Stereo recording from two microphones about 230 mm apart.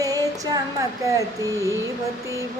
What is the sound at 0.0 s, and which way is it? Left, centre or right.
Female singing, centre.